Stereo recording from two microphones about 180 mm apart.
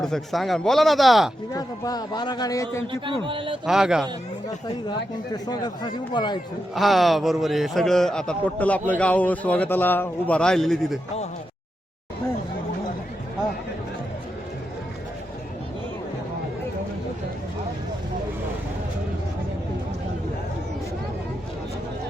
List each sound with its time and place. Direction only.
0.0 s a man's voice: centre (ahead or behind)
1.5 s speech: 20° left (ahead or behind)
2.8 s speech: 30° right (ahead or behind)
3.7 s a man's voice: 5° right (ahead or behind)
4.4 s speech: 20° left (ahead or behind)
6.7 s a man's voice: centre (ahead or behind)